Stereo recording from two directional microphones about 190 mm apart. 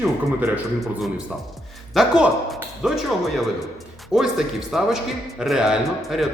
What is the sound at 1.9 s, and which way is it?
Speech, centre (ahead or behind).